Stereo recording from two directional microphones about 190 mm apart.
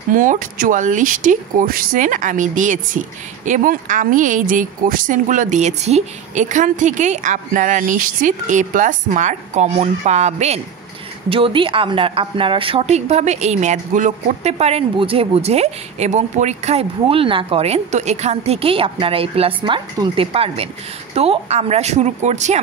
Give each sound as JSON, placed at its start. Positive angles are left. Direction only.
{"t": 0.1, "sound": "a woman's voice", "side_deg": -45}